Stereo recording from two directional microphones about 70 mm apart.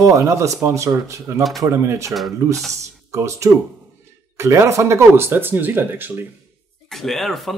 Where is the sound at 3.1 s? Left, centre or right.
Right.